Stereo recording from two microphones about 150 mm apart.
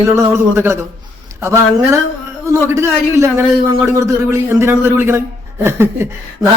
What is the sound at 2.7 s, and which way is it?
A man's voice, 20° right (ahead or behind).